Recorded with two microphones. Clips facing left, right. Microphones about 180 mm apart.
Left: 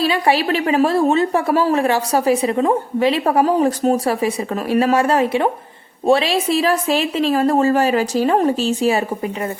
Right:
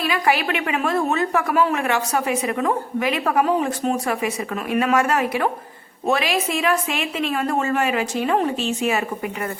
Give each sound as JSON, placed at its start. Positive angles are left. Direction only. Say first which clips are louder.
{"t": 0.0, "sound": "a woman's voice", "louder": "left 4 dB", "side_deg": 30}